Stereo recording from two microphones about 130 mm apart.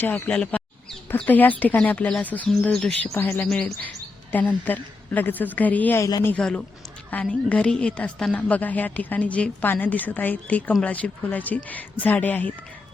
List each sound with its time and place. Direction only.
0.0 s a woman's voice: 10° left (ahead or behind)
2.7 s chirp: 5° left (ahead or behind)
3.2 s a woman's voice: 15° left (ahead or behind)